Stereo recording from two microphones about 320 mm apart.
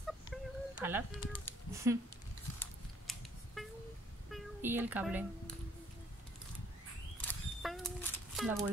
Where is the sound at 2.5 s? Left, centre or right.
Centre.